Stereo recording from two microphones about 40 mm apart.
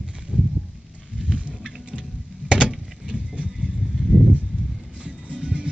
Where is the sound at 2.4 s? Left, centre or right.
Right.